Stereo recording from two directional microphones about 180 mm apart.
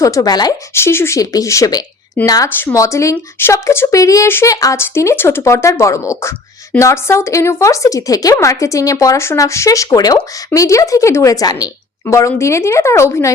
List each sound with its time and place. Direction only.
0.0 s speech: 20° left (ahead or behind)